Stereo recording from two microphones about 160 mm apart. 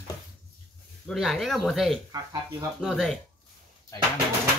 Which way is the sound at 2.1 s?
25° right (ahead or behind).